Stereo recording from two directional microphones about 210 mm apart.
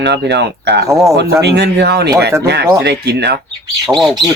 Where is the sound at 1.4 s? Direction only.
55° right (ahead or behind).